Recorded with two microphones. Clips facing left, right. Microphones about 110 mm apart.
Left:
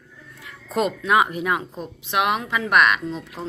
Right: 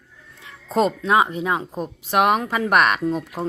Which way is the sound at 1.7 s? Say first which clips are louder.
Right 4 dB; 40° right (ahead or behind).